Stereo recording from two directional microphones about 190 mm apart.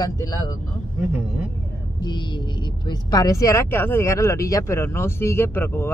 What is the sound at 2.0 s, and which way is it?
Speech, 25° left (ahead or behind).